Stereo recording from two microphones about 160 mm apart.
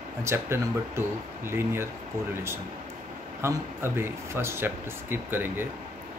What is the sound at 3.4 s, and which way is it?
Speech, 15° right (ahead or behind).